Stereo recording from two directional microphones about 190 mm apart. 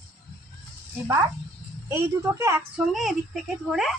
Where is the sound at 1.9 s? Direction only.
15° right (ahead or behind).